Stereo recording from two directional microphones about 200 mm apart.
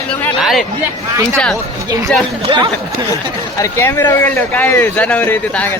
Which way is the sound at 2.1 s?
5° left (ahead or behind).